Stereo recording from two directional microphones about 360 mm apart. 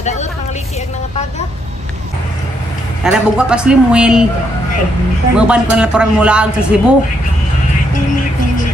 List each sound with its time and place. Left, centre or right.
0.0 s vehicle: centre
3.0 s speech: centre
5.3 s speech: centre